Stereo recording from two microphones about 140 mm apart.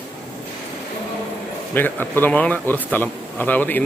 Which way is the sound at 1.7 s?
15° left (ahead or behind).